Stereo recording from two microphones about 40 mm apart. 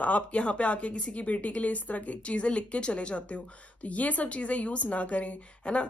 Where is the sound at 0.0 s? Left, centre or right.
Left.